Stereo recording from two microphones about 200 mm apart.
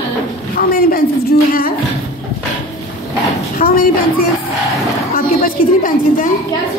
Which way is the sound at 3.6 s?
35° left (ahead or behind).